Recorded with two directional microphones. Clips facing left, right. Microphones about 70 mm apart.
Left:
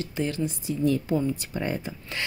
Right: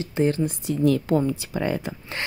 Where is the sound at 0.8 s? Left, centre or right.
Right.